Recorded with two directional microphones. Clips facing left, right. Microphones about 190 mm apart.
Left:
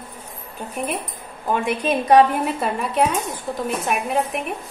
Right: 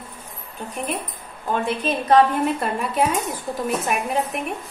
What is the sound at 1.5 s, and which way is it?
Speech, 10° left (ahead or behind).